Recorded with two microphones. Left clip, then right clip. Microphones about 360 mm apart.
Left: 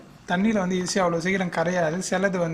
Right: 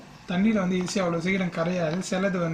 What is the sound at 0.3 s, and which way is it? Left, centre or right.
Speech, centre.